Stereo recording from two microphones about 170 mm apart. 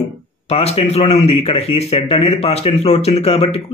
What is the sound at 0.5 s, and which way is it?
Speech, 35° left (ahead or behind).